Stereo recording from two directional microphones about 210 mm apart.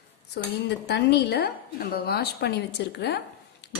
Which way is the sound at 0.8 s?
50° left (ahead or behind).